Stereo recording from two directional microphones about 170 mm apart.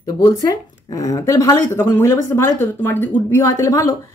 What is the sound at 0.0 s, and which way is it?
Speech, 20° left (ahead or behind).